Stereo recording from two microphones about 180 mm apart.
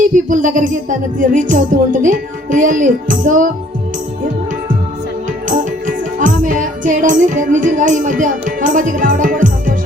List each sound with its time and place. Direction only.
0.0 s music: 45° right (ahead or behind)
5.5 s music: 45° right (ahead or behind)